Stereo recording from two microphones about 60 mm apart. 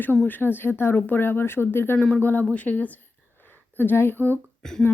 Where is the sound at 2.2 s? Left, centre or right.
Left.